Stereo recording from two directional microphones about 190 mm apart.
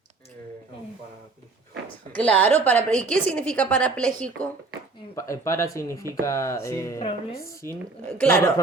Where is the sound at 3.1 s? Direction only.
5° left (ahead or behind).